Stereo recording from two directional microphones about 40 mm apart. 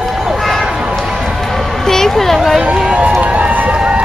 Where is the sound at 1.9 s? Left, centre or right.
Centre.